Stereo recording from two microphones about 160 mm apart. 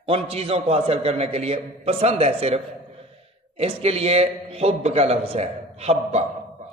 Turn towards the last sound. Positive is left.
turn(degrees=-40)  # may be behind; listen again after turning